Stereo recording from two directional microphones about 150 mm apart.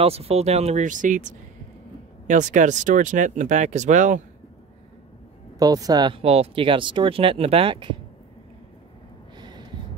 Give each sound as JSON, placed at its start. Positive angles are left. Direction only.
{"t": 0.0, "sound": "speech", "side_deg": -40}
{"t": 5.6, "sound": "speech", "side_deg": -25}
{"t": 6.1, "sound": "speech", "side_deg": -40}
{"t": 9.4, "sound": "a sound", "side_deg": -30}